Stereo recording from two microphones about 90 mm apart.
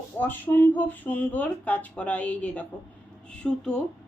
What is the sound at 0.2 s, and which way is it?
A woman's voice, 20° left (ahead or behind).